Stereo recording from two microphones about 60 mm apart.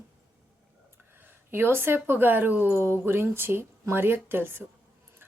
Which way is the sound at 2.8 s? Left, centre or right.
Right.